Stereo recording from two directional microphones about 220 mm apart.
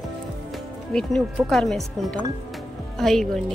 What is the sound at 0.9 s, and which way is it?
A woman's voice, centre (ahead or behind).